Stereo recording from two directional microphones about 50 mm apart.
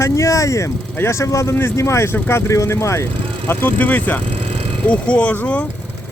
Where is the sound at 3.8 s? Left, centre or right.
Left.